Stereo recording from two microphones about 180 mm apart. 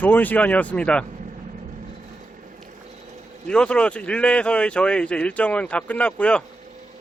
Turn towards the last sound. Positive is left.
turn(degrees=5)  # may be behind; listen again after turning